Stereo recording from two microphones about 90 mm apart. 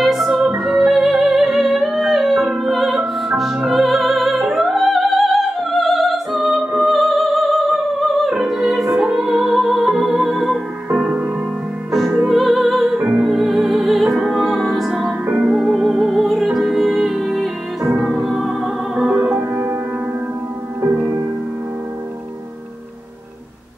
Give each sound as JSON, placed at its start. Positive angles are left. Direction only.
{"t": 0.0, "sound": "music", "side_deg": 0}
{"t": 10.9, "sound": "music", "side_deg": -15}
{"t": 12.3, "sound": "music", "side_deg": 0}
{"t": 19.1, "sound": "music", "side_deg": -20}